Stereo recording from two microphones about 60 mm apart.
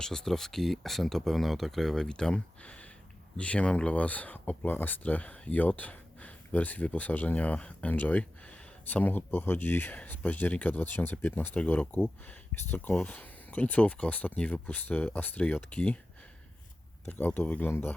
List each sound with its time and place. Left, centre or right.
0.0 s speech: centre
17.1 s speech: left